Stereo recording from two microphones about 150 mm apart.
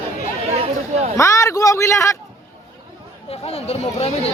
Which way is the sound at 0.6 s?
45° right (ahead or behind).